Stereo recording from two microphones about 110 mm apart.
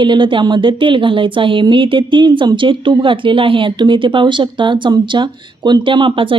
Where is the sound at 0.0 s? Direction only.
45° right (ahead or behind).